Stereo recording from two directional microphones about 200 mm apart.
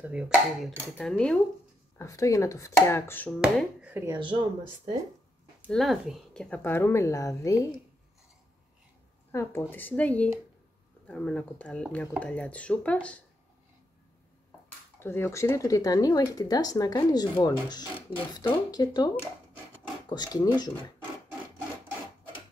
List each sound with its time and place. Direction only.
0.0 s speech: 5° right (ahead or behind)
2.0 s speech: 15° left (ahead or behind)
3.3 s speech: 5° right (ahead or behind)
4.0 s speech: 20° right (ahead or behind)
5.7 s speech: centre (ahead or behind); by 7.8 s 15° left (ahead or behind)
9.3 s speech: 15° left (ahead or behind)
15.0 s speech: 10° left (ahead or behind)